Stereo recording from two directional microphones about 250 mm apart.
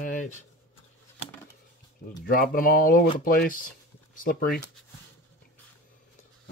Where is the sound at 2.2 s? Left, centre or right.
Left.